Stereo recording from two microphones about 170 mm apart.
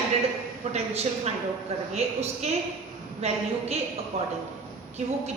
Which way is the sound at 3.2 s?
40° right (ahead or behind).